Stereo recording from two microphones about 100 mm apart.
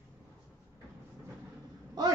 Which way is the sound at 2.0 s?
40° right (ahead or behind).